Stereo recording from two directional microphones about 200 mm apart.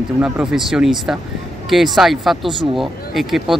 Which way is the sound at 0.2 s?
5° right (ahead or behind).